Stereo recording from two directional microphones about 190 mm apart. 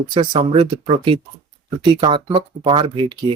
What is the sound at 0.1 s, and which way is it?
Speech, 30° right (ahead or behind).